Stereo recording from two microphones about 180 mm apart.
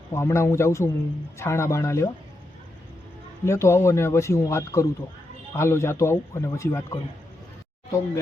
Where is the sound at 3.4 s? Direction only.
15° left (ahead or behind).